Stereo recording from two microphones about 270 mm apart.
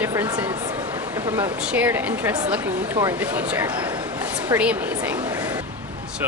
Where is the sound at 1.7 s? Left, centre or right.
Centre.